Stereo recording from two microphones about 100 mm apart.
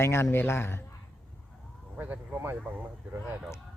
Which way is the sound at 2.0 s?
20° right (ahead or behind).